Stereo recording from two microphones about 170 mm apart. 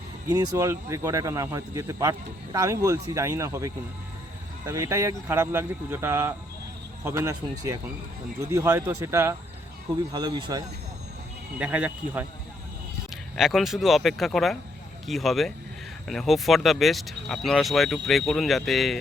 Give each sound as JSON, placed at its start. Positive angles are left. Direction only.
{"t": 0.3, "sound": "speech", "side_deg": -20}
{"t": 10.1, "sound": "speech", "side_deg": -25}
{"t": 11.6, "sound": "speech", "side_deg": -5}
{"t": 13.3, "sound": "speech", "side_deg": 0}